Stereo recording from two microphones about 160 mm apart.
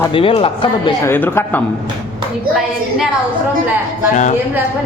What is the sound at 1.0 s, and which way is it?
Speech, 15° left (ahead or behind).